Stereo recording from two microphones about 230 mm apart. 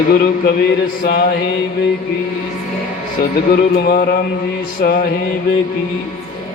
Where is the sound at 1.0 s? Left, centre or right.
Left.